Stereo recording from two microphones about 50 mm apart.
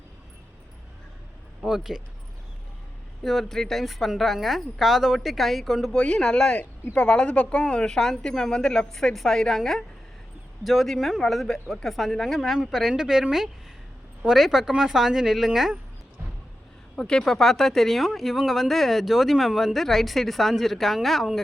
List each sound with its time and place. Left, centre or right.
1.6 s a woman's voice: centre
3.2 s speech: centre
6.0 s a woman's voice: centre
14.3 s a woman's voice: centre
16.9 s speech: centre